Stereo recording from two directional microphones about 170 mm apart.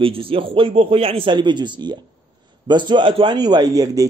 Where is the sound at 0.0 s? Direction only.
30° right (ahead or behind).